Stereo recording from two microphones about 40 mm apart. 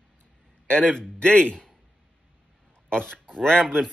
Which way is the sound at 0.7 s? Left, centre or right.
Left.